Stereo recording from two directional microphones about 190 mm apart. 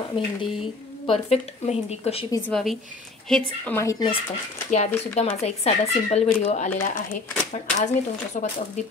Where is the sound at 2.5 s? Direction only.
Centre (ahead or behind).